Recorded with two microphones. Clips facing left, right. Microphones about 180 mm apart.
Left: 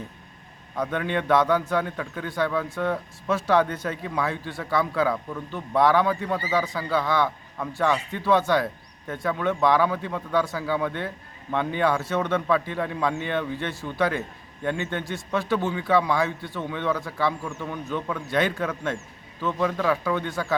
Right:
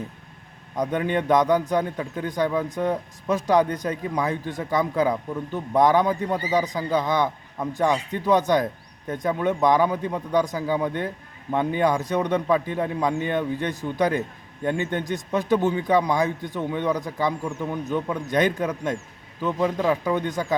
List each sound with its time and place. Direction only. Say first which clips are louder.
0.8 s a man's voice: right 3 dB; 15° right (ahead or behind)